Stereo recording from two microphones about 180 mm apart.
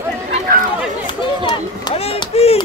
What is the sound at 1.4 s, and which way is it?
Run, 25° left (ahead or behind).